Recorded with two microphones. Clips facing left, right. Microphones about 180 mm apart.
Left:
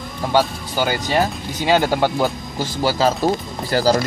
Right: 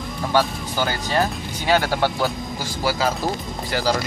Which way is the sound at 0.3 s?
15° left (ahead or behind).